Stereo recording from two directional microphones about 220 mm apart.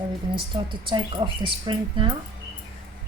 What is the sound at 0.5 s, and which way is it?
Speech, 20° right (ahead or behind).